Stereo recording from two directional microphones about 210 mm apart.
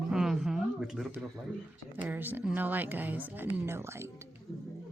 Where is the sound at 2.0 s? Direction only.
10° right (ahead or behind).